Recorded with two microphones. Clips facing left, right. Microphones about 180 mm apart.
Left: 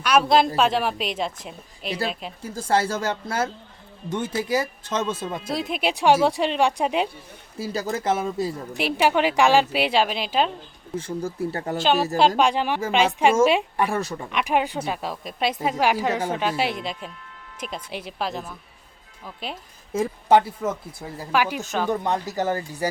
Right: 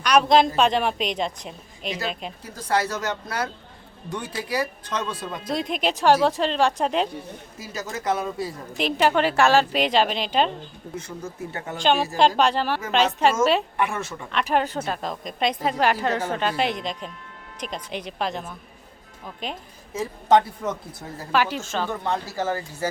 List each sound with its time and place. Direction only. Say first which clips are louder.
0.0 s a woman's voice: right 1 dB; 5° left (ahead or behind)
2.4 s speech: left 2 dB; 30° left (ahead or behind)
5.5 s a woman's voice: right 1 dB; 5° left (ahead or behind)
7.6 s speech: left 5 dB; 30° left (ahead or behind)
8.8 s a woman's voice: even; 10° left (ahead or behind)
10.9 s speech: left 7 dB; 30° left (ahead or behind)
11.8 s a woman's voice: even; 5° left (ahead or behind)
13.7 s speech: left 2 dB; 35° left (ahead or behind)
14.1 s a woman's voice: even; 10° left (ahead or behind)
20.2 s a woman's voice: even; 5° left (ahead or behind)